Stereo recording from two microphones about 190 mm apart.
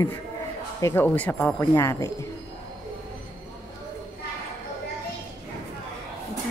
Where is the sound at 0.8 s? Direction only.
10° left (ahead or behind).